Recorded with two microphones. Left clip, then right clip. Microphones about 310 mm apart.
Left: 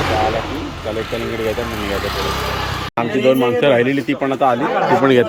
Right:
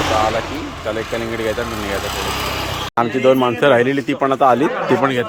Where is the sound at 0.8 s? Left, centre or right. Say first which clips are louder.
Right 1 dB; centre.